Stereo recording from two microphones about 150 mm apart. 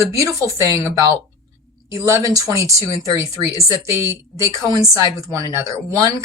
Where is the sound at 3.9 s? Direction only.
20° right (ahead or behind).